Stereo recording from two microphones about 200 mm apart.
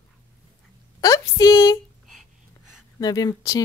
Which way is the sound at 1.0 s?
15° left (ahead or behind).